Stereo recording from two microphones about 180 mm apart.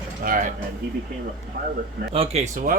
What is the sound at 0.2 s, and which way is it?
Speech, 50° right (ahead or behind).